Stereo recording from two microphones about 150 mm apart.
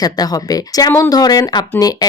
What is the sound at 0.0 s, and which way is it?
Speech, 25° left (ahead or behind).